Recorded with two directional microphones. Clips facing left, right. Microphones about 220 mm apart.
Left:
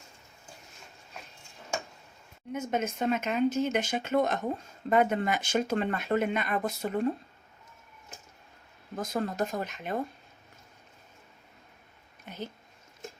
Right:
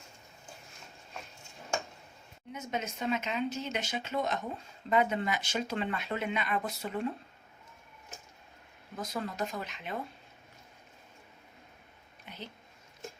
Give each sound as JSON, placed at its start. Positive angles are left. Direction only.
{"t": 2.5, "sound": "speech", "side_deg": 50}
{"t": 9.0, "sound": "speech", "side_deg": 50}
{"t": 12.2, "sound": "a sound", "side_deg": 45}